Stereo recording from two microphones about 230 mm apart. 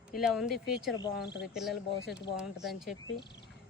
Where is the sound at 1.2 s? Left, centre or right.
Left.